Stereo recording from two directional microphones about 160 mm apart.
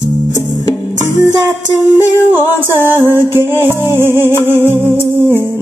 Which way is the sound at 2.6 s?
15° right (ahead or behind).